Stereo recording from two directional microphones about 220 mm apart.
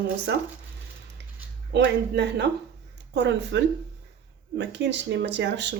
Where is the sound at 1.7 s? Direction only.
50° right (ahead or behind).